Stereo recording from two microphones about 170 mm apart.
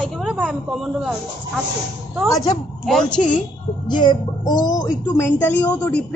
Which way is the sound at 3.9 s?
25° left (ahead or behind).